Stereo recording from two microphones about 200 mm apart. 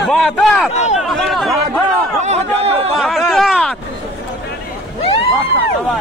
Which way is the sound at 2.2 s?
30° right (ahead or behind).